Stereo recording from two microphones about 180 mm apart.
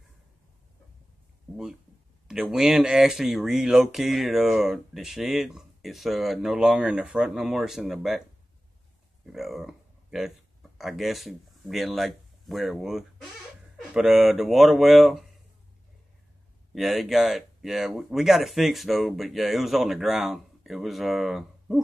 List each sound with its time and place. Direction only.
2.2 s speech: centre (ahead or behind)
9.2 s speech: centre (ahead or behind)
16.7 s speech: centre (ahead or behind)